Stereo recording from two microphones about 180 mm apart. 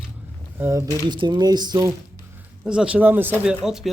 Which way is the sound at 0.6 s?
15° right (ahead or behind).